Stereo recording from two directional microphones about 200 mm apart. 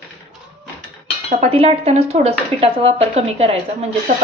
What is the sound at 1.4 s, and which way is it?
A woman's voice, 30° right (ahead or behind).